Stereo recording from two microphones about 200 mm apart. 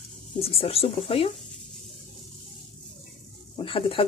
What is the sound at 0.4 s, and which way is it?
Speech, 30° left (ahead or behind).